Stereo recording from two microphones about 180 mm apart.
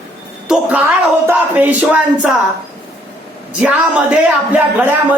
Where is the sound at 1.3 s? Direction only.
10° right (ahead or behind).